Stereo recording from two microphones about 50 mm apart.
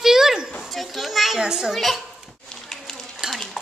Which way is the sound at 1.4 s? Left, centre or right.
Centre.